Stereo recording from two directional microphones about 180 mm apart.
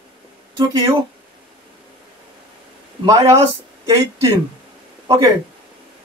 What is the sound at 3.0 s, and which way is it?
Speech, 15° right (ahead or behind).